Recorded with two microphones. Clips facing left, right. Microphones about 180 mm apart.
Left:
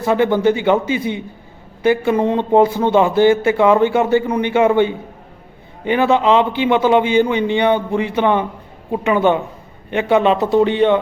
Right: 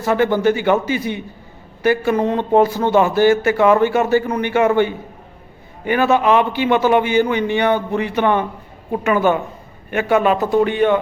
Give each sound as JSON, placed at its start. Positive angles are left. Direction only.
{"t": 0.0, "sound": "a man's voice", "side_deg": 15}